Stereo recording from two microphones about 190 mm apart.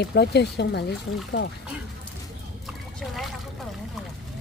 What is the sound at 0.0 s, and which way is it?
Speech, 60° left (ahead or behind).